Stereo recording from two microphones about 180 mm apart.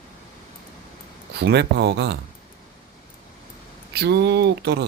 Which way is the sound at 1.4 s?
65° right (ahead or behind).